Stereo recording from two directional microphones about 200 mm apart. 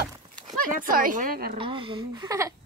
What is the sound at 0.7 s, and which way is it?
Speech, 45° right (ahead or behind).